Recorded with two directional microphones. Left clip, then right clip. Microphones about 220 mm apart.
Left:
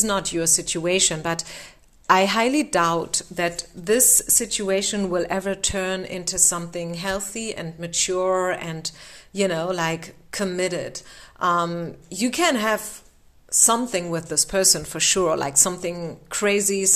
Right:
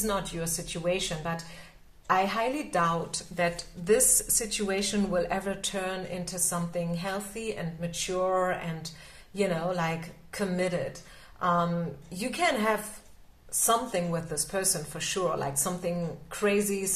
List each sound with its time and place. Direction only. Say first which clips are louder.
0.0 s a woman's voice: left 8 dB; 45° left (ahead or behind)